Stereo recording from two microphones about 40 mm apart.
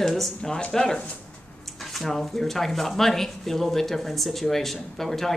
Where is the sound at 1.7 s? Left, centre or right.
Centre.